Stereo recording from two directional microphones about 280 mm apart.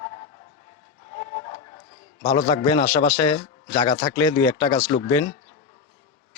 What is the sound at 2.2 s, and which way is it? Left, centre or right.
A man's voice, centre.